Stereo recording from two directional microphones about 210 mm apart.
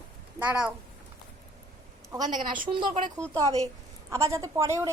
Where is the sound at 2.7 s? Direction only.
20° right (ahead or behind).